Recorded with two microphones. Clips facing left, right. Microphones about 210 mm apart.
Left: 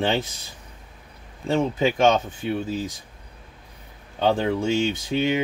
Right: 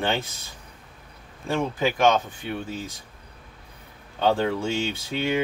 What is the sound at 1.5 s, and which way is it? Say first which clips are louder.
Speech: left 3 dB; 25° left (ahead or behind).